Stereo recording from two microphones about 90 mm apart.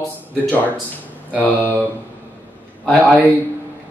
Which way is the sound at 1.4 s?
20° left (ahead or behind).